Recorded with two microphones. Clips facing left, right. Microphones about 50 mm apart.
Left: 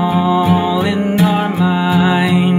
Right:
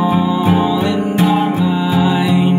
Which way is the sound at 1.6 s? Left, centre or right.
Left.